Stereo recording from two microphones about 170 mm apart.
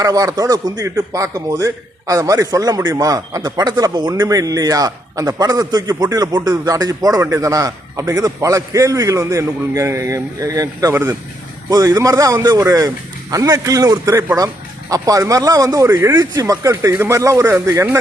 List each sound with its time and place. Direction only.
0.0 s a man's voice: 20° right (ahead or behind)